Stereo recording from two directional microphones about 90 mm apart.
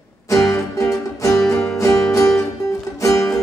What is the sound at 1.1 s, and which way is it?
Music, 35° left (ahead or behind).